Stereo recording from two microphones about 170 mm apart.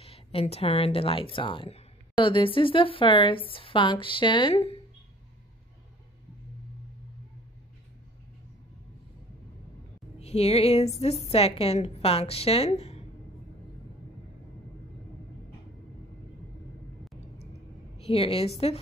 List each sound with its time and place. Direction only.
0.0 s speech: 35° left (ahead or behind)
10.2 s speech: 35° left (ahead or behind)
17.9 s a woman's voice: 35° left (ahead or behind)